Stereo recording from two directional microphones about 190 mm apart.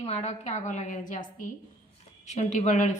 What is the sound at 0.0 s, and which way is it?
Speech, 35° left (ahead or behind).